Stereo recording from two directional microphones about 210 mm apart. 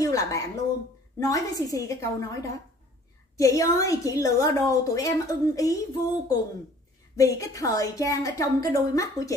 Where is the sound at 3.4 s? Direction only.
15° left (ahead or behind).